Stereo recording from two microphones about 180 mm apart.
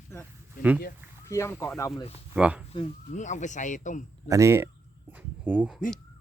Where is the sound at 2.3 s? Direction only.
5° right (ahead or behind).